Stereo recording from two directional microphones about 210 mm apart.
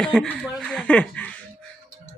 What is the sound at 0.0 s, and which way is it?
Speech, 5° left (ahead or behind).